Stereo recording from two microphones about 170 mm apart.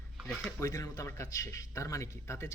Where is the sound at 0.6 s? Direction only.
20° left (ahead or behind).